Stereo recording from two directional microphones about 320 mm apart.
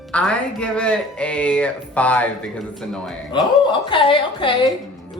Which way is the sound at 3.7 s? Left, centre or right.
Centre.